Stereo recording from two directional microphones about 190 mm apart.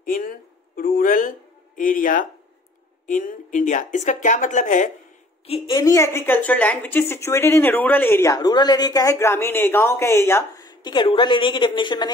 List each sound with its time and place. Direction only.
0.0 s a sound: 45° left (ahead or behind)
1.8 s speech: 45° left (ahead or behind)
5.7 s a woman's voice: 15° left (ahead or behind)